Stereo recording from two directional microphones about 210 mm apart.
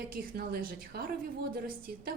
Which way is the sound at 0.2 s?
45° right (ahead or behind).